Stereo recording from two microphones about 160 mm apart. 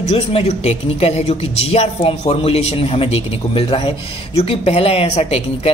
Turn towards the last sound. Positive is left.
turn(degrees=40)  # may be behind; listen again after turning